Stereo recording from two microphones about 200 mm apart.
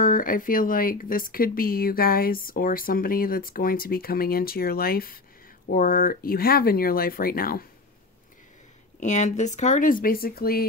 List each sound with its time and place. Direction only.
0.0 s speech: 45° left (ahead or behind)
9.0 s speech: 35° left (ahead or behind)